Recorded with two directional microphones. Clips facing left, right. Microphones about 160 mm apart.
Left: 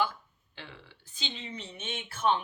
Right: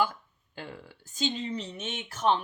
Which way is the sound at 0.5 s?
45° right (ahead or behind).